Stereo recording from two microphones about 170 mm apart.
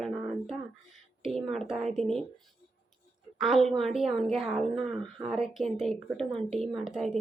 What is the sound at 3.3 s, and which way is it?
Speech, centre (ahead or behind).